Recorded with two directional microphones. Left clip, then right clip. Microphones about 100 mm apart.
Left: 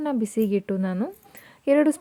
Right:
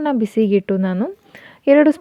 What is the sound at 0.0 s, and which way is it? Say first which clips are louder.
A woman's voice: right 7 dB; 40° right (ahead or behind).